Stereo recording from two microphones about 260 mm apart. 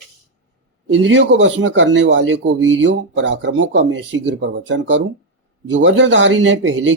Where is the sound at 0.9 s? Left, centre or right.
Right.